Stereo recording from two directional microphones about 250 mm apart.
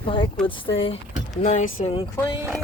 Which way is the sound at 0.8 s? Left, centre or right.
Left.